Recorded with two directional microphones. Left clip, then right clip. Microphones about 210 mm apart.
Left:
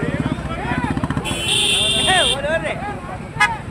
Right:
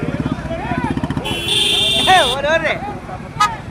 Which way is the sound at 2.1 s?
30° right (ahead or behind).